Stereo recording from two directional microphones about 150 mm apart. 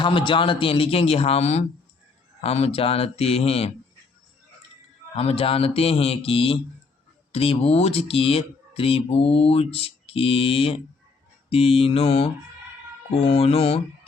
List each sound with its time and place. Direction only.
0.0 s speech: 35° left (ahead or behind)
5.1 s speech: 40° left (ahead or behind)